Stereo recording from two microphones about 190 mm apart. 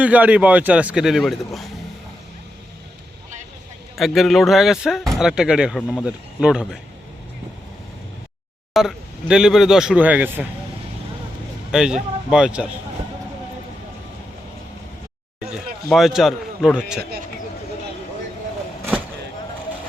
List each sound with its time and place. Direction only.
0.0 s speech: 5° right (ahead or behind)
3.9 s speech: centre (ahead or behind)
8.7 s speech: centre (ahead or behind)
11.7 s speech: 5° right (ahead or behind)
15.4 s speech: centre (ahead or behind)